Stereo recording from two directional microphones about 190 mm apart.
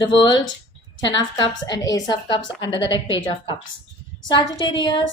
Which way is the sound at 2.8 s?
75° left (ahead or behind).